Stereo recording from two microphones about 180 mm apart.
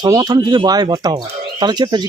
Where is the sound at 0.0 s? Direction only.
20° right (ahead or behind).